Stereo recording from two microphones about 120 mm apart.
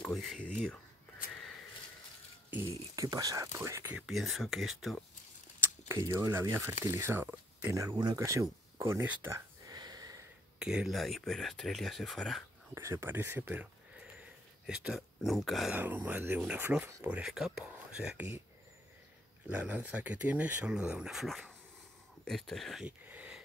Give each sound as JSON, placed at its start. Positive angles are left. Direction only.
{"t": 0.0, "sound": "speech", "side_deg": 0}
{"t": 3.0, "sound": "speech", "side_deg": -30}
{"t": 3.9, "sound": "speech", "side_deg": -5}
{"t": 5.9, "sound": "speech", "side_deg": -25}
{"t": 7.9, "sound": "speech", "side_deg": -35}
{"t": 9.7, "sound": "a sound", "side_deg": -35}
{"t": 10.6, "sound": "speech", "side_deg": -5}
{"t": 12.7, "sound": "speech", "side_deg": -20}
{"t": 15.7, "sound": "speech", "side_deg": -15}
{"t": 17.1, "sound": "speech", "side_deg": -5}
{"t": 19.4, "sound": "speech", "side_deg": -10}
{"t": 22.8, "sound": "a sound", "side_deg": -10}